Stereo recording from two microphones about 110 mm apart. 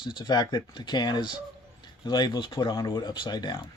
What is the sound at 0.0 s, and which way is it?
Speech, 45° left (ahead or behind).